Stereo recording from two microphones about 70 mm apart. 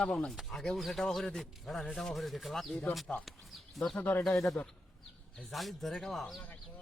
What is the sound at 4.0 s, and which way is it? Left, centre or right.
Speech, left.